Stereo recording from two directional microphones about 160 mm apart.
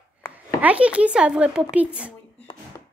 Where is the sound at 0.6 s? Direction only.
10° right (ahead or behind).